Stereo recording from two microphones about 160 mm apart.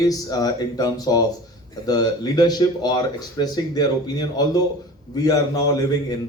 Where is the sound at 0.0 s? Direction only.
20° left (ahead or behind).